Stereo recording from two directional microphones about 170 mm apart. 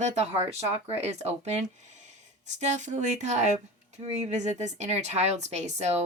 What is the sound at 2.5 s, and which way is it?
Speech, 45° right (ahead or behind).